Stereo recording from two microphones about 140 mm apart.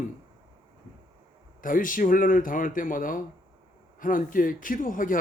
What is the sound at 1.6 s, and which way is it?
Speech, 75° left (ahead or behind).